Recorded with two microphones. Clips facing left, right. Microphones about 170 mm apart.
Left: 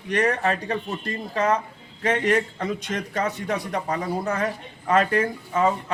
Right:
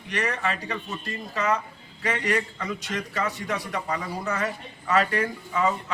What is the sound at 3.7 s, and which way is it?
Speech, 40° left (ahead or behind).